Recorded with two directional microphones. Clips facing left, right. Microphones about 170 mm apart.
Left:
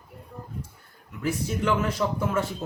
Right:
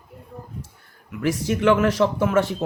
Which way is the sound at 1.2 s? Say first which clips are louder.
Right 7 dB; 90° right.